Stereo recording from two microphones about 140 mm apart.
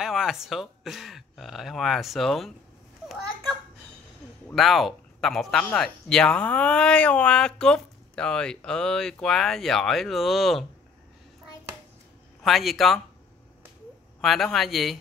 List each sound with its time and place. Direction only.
0.0 s speech: 5° right (ahead or behind)
4.6 s speech: centre (ahead or behind)
12.4 s speech: centre (ahead or behind)
14.2 s speech: centre (ahead or behind)